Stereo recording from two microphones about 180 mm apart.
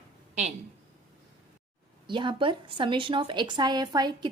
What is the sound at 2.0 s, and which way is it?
Speech, 25° right (ahead or behind).